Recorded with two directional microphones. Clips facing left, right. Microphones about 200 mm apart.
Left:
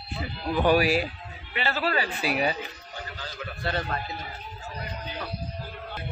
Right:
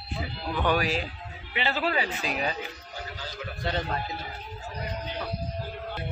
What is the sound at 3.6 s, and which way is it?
Speech, 20° right (ahead or behind).